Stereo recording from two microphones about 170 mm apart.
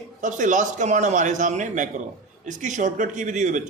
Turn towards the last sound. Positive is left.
turn(degrees=-45)  # may be behind; listen again after turning